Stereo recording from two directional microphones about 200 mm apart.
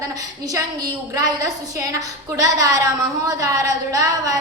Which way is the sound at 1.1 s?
15° right (ahead or behind).